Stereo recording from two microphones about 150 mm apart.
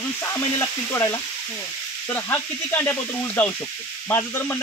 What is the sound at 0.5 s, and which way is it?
Speech, 15° left (ahead or behind).